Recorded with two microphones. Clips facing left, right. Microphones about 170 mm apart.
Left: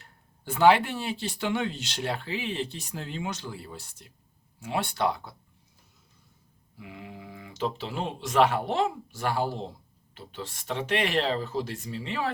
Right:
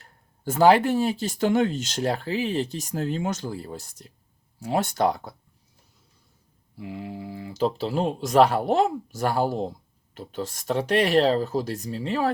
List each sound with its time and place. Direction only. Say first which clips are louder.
0.0 s speech: right 10 dB; 40° right (ahead or behind)
6.7 s speech: right 8 dB; 30° right (ahead or behind)